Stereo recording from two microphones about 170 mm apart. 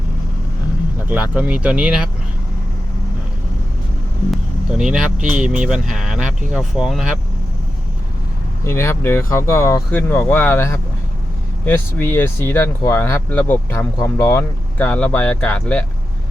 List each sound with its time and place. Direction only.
1.0 s speech: 5° right (ahead or behind)
4.3 s vehicle: 5° right (ahead or behind)
5.3 s speech: 5° right (ahead or behind)
8.6 s speech: 15° left (ahead or behind)